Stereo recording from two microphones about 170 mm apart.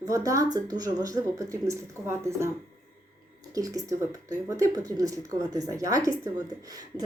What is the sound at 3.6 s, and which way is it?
A woman's voice, 20° right (ahead or behind).